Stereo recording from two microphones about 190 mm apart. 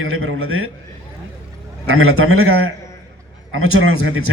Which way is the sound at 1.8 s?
90° right.